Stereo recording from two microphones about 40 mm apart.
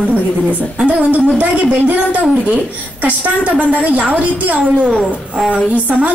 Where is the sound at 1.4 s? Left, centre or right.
Right.